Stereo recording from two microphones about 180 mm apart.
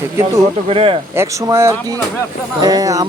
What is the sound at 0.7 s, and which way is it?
Speech, 30° right (ahead or behind).